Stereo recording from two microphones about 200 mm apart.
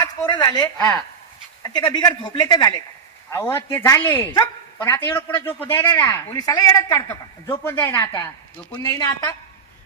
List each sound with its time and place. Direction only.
0.3 s a man's voice: 20° left (ahead or behind)